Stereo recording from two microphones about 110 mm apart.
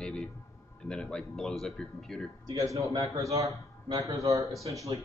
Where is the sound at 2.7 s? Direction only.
30° right (ahead or behind).